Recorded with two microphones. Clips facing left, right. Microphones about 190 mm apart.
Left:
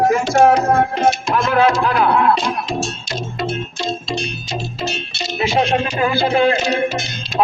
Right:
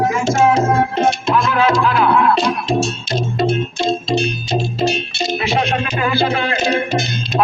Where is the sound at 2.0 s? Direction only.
35° left (ahead or behind).